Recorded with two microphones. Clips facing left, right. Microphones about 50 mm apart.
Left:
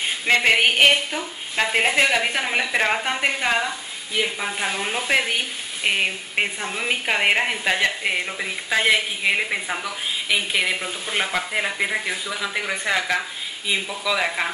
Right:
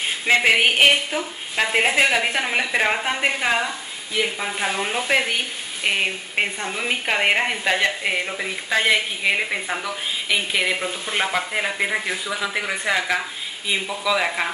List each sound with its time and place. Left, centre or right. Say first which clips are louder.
0.3 s a woman's voice: right 1 dB; centre